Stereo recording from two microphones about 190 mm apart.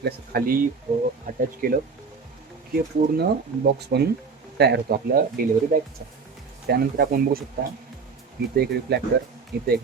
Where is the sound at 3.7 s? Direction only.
60° right (ahead or behind).